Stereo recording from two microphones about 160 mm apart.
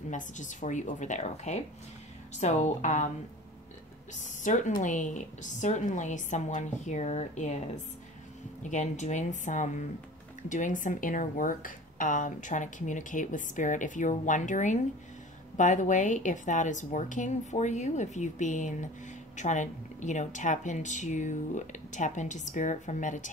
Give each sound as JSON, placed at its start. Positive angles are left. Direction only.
{"t": 0.1, "sound": "speech", "side_deg": 50}
{"t": 4.1, "sound": "speech", "side_deg": 50}